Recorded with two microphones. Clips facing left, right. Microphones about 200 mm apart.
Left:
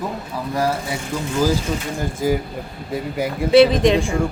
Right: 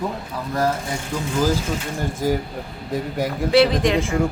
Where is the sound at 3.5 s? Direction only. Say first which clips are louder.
Left 4 dB; 20° left (ahead or behind).